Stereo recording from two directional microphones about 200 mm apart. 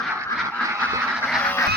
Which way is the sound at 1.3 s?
5° left (ahead or behind).